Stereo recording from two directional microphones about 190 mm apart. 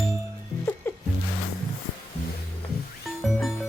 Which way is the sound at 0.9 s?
10° left (ahead or behind).